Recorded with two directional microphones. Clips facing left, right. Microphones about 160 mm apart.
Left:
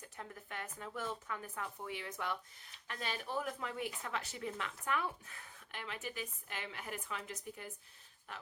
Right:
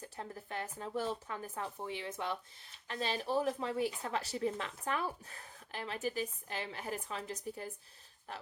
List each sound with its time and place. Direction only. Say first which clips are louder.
0.0 s speech: right 5 dB; 30° right (ahead or behind)